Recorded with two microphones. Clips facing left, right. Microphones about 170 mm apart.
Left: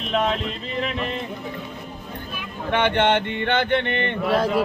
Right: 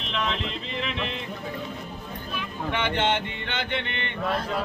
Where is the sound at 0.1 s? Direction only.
45° left (ahead or behind).